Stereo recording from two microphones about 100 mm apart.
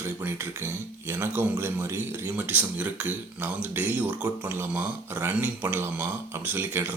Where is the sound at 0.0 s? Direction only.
20° right (ahead or behind).